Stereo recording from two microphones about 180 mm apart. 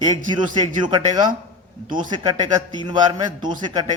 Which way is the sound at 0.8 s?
25° right (ahead or behind).